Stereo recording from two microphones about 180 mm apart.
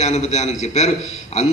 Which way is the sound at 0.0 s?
40° left (ahead or behind).